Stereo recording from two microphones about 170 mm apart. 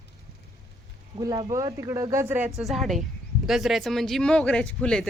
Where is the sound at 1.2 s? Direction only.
20° right (ahead or behind).